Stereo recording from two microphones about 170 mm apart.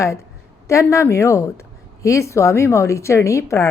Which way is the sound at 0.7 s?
15° left (ahead or behind).